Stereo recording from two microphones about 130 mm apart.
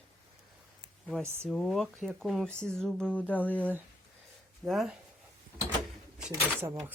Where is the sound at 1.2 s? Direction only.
20° right (ahead or behind).